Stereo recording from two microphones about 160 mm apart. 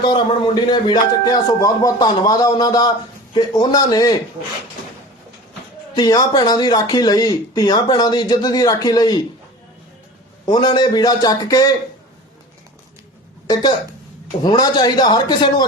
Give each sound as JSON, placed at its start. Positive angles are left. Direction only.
{"t": 0.0, "sound": "speech", "side_deg": 30}
{"t": 5.9, "sound": "speech", "side_deg": 25}
{"t": 10.4, "sound": "speech", "side_deg": 25}
{"t": 13.5, "sound": "speech", "side_deg": 25}